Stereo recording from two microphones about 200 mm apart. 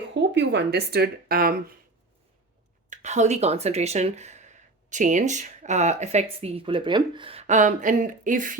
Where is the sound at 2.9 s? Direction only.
35° right (ahead or behind).